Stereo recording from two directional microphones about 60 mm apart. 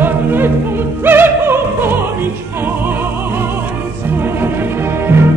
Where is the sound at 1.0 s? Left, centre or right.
Right.